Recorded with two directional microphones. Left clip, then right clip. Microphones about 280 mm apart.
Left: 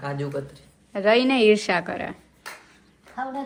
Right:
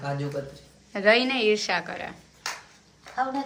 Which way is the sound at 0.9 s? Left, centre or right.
Centre.